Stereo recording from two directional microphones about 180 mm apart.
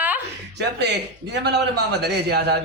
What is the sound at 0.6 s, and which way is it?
A man's voice, 70° right (ahead or behind).